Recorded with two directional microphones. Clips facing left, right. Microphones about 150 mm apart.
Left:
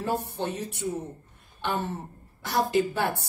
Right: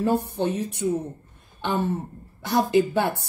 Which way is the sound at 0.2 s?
15° right (ahead or behind).